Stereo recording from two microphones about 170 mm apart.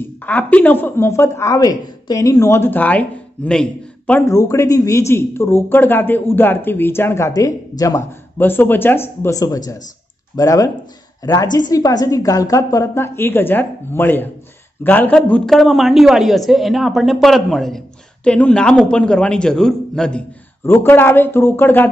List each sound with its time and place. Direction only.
0.0 s speech: 10° left (ahead or behind)
4.1 s a woman's voice: 20° left (ahead or behind)